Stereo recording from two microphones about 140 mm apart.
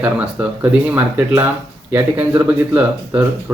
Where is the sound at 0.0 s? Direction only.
15° right (ahead or behind).